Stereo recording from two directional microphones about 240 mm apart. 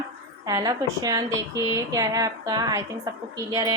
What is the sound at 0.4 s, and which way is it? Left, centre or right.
A woman's voice, centre.